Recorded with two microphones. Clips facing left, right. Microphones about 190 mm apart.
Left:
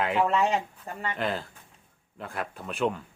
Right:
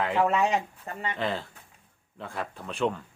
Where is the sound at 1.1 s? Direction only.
5° left (ahead or behind).